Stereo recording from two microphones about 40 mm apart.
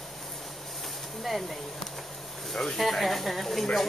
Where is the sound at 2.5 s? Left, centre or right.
Centre.